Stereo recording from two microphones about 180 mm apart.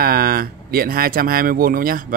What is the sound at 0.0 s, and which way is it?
Speech, 55° right (ahead or behind).